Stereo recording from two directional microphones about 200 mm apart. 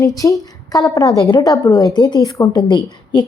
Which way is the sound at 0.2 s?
15° left (ahead or behind).